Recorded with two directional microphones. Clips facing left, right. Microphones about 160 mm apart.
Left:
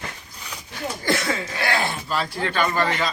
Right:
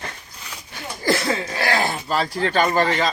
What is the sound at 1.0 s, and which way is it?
Speech, 35° right (ahead or behind).